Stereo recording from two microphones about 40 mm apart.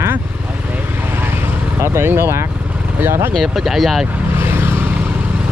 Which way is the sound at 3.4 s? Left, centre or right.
Centre.